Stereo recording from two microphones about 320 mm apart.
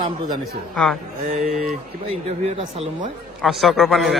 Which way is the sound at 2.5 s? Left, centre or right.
Right.